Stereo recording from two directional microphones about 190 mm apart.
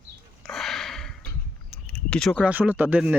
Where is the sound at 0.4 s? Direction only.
Centre (ahead or behind).